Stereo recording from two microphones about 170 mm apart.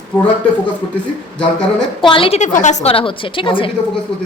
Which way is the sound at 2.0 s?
30° left (ahead or behind).